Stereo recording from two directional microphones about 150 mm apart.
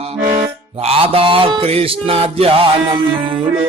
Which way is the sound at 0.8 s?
40° right (ahead or behind).